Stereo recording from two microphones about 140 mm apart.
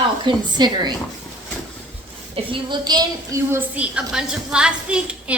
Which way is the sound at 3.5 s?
10° right (ahead or behind).